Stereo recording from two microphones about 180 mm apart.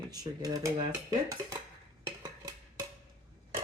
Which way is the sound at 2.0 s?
15° right (ahead or behind).